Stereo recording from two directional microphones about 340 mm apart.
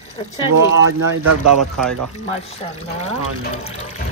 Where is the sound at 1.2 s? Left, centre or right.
Right.